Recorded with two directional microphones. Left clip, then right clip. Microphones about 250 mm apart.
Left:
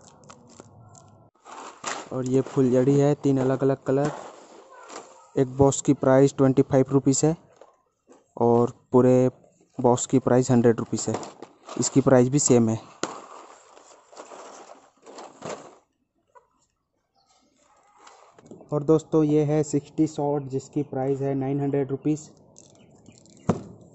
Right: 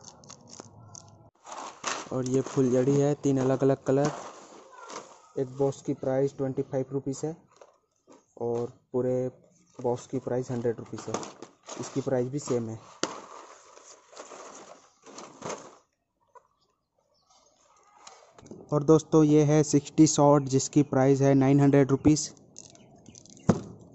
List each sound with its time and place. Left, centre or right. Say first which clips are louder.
0.6 s a sound: right 1 dB; centre
1.8 s speech: left 1 dB; centre
5.3 s speech: left 8 dB; left
8.4 s speech: left 10 dB; left
11.1 s speech: left 4 dB; centre
11.8 s speech: left 10 dB; left
13.0 s a sound: left 1 dB; centre
18.7 s a man's voice: even; centre
23.3 s a sound: even; centre